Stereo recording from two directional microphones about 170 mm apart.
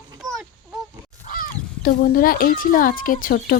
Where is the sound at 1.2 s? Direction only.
55° left (ahead or behind).